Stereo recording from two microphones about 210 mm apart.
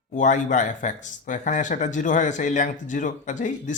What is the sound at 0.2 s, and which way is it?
Speech, 35° left (ahead or behind).